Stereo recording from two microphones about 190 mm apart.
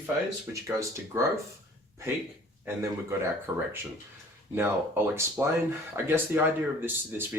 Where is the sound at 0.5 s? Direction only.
15° right (ahead or behind).